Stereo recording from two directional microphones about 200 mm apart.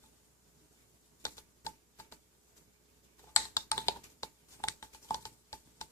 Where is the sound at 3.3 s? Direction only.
15° left (ahead or behind).